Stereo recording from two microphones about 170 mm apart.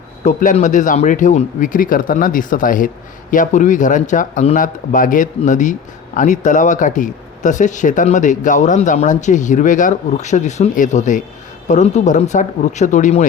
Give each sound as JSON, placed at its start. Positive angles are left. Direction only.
{"t": 0.3, "sound": "speech", "side_deg": 45}